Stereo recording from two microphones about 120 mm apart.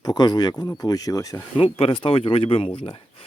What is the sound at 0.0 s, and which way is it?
Speech, 35° left (ahead or behind).